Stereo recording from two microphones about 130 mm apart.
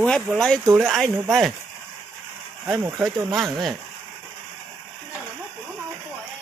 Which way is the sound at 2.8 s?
25° right (ahead or behind).